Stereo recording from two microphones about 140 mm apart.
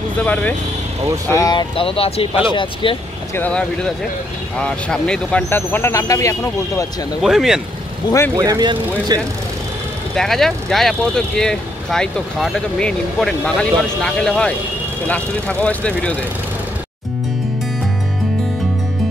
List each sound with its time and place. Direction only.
0.2 s speech: 10° left (ahead or behind)
1.3 s speech: 30° left (ahead or behind)
3.3 s speech: 10° left (ahead or behind)
7.2 s speech: centre (ahead or behind)
8.4 s speech: 30° right (ahead or behind)
10.1 s speech: 5° left (ahead or behind)